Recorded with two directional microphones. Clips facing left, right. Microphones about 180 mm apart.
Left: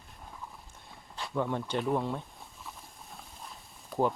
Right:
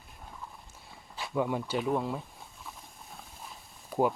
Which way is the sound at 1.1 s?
5° right (ahead or behind).